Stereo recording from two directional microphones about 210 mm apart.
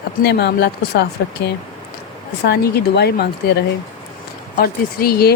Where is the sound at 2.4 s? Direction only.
50° left (ahead or behind).